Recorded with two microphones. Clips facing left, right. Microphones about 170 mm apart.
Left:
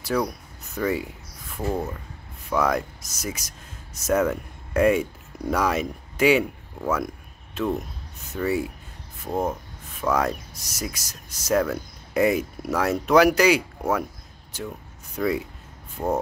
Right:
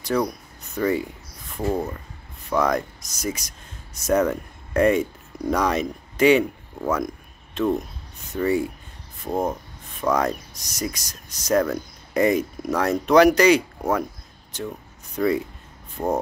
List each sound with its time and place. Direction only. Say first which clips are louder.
0.0 s speech: right 2 dB; 5° left (ahead or behind)
0.7 s a sound: right 3 dB; 5° left (ahead or behind)
2.5 s speech: right 1 dB; 5° left (ahead or behind)
7.5 s speech: right 3 dB; 5° left (ahead or behind)